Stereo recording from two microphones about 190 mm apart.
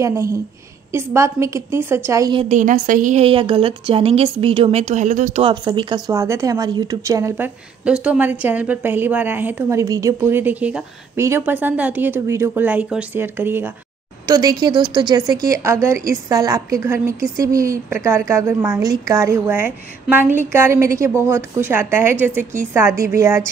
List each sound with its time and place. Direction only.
0.0 s a woman's voice: 15° right (ahead or behind)
2.4 s a woman's voice: 40° right (ahead or behind)
5.4 s a woman's voice: 25° right (ahead or behind)
22.4 s speech: 40° right (ahead or behind)
23.0 s a woman's voice: 15° right (ahead or behind)